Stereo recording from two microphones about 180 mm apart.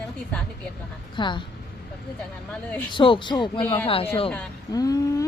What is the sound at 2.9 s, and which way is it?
Speech, 25° left (ahead or behind).